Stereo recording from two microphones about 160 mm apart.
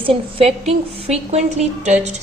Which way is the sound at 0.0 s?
35° right (ahead or behind).